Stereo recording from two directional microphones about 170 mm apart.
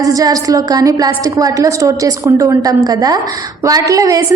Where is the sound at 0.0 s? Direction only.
20° right (ahead or behind).